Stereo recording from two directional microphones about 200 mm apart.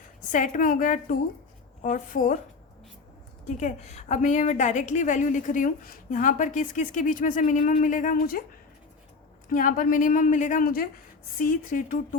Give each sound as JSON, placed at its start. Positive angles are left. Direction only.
{"t": 0.3, "sound": "a woman's voice", "side_deg": 40}
{"t": 3.4, "sound": "a woman's voice", "side_deg": 35}
{"t": 9.5, "sound": "a woman's voice", "side_deg": 45}